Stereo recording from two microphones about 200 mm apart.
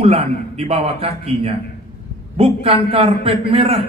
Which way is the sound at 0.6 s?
30° right (ahead or behind).